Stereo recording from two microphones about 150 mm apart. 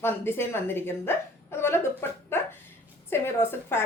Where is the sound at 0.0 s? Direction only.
15° left (ahead or behind).